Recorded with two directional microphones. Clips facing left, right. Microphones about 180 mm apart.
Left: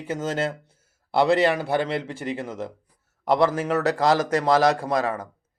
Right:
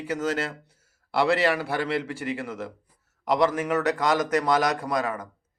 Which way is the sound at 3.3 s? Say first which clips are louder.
Left 2 dB; 30° left (ahead or behind).